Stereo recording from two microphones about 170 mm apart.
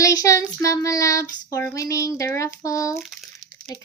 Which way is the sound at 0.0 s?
20° left (ahead or behind).